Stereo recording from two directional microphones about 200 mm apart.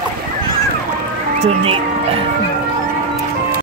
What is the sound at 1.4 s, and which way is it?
Speech, 30° right (ahead or behind).